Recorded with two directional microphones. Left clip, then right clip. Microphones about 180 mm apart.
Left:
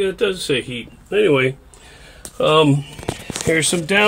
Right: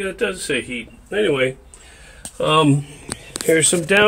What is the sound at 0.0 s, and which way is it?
A man's voice, 30° left (ahead or behind).